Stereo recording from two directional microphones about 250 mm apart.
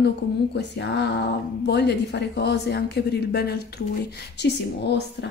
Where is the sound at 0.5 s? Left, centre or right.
Left.